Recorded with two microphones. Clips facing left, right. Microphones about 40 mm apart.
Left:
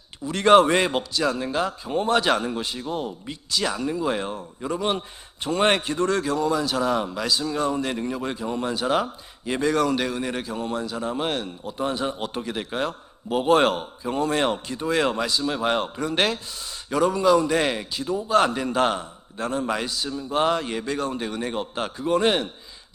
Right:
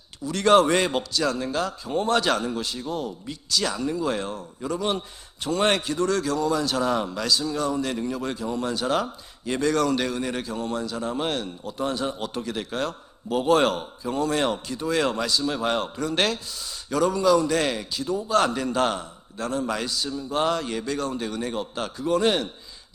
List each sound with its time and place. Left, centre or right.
0.3 s a man's voice: left
6.5 s a man's voice: centre
7.4 s a man's voice: left